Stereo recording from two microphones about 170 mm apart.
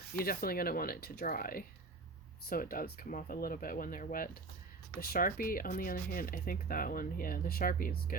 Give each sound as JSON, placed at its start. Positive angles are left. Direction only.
{"t": 0.1, "sound": "speech", "side_deg": 60}